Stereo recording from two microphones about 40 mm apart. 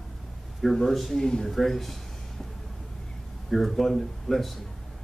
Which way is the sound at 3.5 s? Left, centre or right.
Centre.